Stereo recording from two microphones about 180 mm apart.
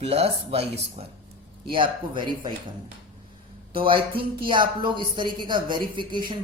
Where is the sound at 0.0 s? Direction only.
35° right (ahead or behind).